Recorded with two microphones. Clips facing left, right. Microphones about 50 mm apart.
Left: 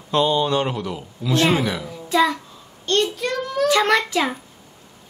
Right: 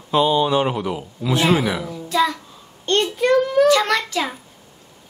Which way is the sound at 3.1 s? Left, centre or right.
Right.